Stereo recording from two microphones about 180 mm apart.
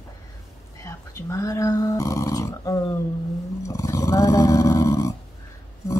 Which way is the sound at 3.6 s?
20° left (ahead or behind).